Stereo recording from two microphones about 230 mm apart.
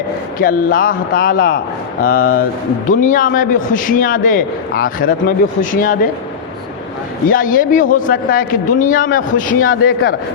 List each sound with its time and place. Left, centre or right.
0.3 s a man's voice: left
7.3 s a man's voice: left
9.6 s a man's voice: left